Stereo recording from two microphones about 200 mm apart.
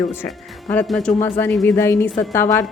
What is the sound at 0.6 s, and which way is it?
A woman's voice, 5° left (ahead or behind).